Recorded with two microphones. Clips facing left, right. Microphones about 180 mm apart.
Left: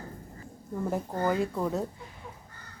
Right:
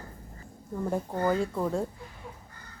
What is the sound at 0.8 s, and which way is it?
Speech, centre (ahead or behind).